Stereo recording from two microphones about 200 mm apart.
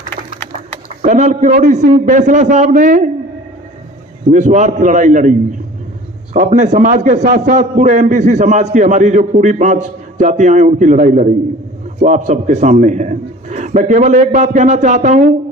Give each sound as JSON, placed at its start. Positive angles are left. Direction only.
{"t": 1.0, "sound": "a man's voice", "side_deg": -40}
{"t": 4.3, "sound": "a man's voice", "side_deg": -40}